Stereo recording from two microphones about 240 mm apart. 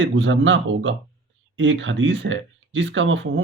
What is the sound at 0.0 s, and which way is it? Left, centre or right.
Speech, right.